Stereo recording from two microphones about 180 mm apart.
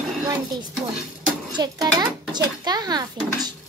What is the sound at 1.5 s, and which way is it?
A child's voice, 20° right (ahead or behind).